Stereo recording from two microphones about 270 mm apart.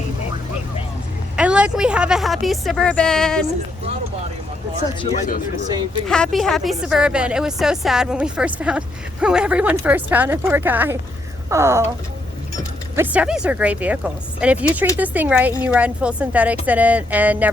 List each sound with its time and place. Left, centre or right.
1.4 s a woman's voice: centre
5.0 s speech: left
6.1 s a woman's voice: centre
13.0 s a woman's voice: centre